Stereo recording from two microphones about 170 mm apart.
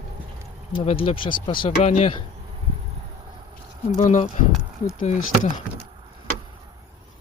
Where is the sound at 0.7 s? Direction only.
30° left (ahead or behind).